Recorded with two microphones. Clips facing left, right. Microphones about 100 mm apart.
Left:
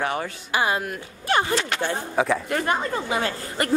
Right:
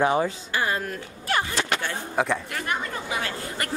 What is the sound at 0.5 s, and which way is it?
Speech, 15° left (ahead or behind).